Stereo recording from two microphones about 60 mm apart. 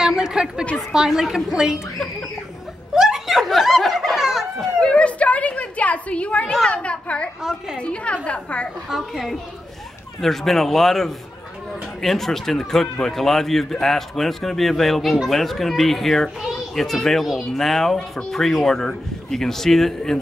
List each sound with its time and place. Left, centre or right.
0.0 s a sound: centre
0.7 s a woman's voice: centre
2.9 s snicker: centre
4.7 s a sound: centre
6.6 s a woman's voice: centre
8.9 s a child's voice: centre